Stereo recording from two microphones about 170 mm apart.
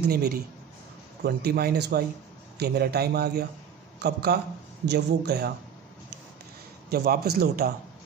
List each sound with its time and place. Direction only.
0.0 s a man's voice: 65° right (ahead or behind)
6.9 s speech: 70° right (ahead or behind)